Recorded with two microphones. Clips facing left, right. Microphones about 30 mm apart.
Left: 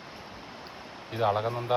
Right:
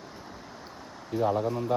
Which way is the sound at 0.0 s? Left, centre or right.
Left.